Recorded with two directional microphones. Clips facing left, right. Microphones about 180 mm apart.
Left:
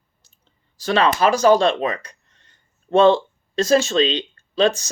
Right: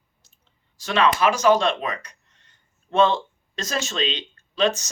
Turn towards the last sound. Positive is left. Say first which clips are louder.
# left 4 dB
turn(degrees=30)  # may be behind; listen again after turning